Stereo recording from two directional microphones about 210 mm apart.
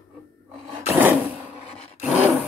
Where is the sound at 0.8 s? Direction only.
10° right (ahead or behind).